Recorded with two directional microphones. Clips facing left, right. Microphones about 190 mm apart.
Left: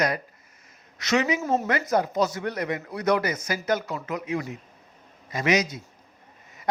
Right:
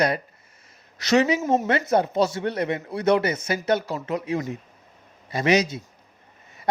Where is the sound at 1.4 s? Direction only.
20° right (ahead or behind).